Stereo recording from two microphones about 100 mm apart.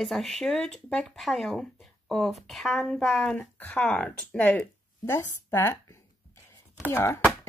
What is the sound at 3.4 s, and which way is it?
Speech, 15° left (ahead or behind).